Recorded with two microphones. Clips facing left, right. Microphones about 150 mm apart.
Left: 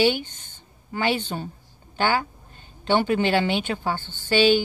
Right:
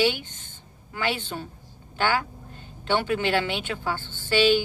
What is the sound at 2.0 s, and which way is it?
A woman's voice, 30° left (ahead or behind).